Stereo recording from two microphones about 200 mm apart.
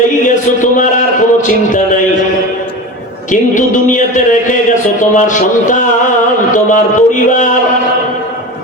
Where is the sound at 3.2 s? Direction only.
40° left (ahead or behind).